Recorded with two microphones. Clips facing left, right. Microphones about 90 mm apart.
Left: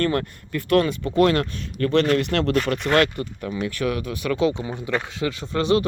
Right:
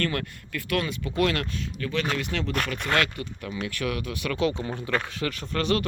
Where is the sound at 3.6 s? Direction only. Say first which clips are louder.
Left 5 dB; 30° left (ahead or behind).